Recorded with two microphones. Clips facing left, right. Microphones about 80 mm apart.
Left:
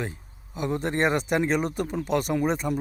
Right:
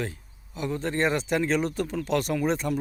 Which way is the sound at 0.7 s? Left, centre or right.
Centre.